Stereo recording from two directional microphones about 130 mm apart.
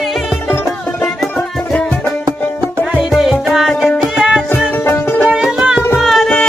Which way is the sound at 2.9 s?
5° right (ahead or behind).